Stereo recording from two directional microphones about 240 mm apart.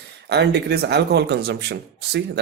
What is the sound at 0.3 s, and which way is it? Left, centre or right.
Speech, right.